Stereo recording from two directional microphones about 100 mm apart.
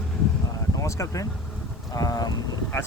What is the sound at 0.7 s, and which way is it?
Speech, 30° left (ahead or behind).